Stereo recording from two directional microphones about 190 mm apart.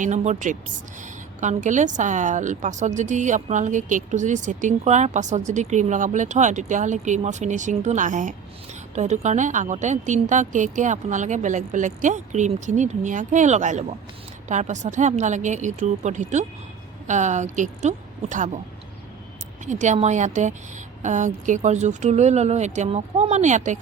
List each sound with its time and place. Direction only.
0.0 s a woman's voice: 40° right (ahead or behind)
19.6 s a woman's voice: 40° right (ahead or behind)